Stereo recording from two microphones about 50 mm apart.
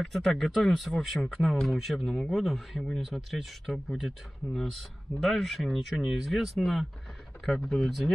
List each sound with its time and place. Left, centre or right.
0.0 s speech: centre
4.6 s speech: centre